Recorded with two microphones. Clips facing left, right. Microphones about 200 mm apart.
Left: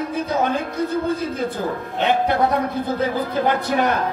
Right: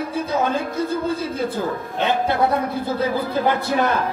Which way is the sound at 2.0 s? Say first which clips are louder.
Left 2 dB; 15° left (ahead or behind).